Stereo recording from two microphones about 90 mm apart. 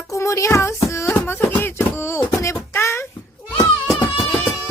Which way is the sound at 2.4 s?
30° left (ahead or behind).